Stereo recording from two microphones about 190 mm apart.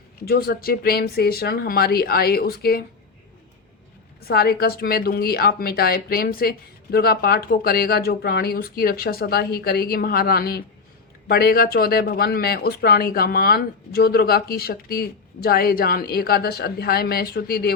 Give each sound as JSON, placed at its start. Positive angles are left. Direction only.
{"t": 0.2, "sound": "speech", "side_deg": 55}
{"t": 4.3, "sound": "speech", "side_deg": 55}